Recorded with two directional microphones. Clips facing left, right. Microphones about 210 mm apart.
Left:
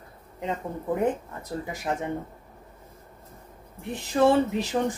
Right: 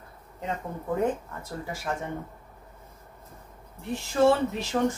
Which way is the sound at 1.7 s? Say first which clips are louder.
Left 2 dB; 20° left (ahead or behind).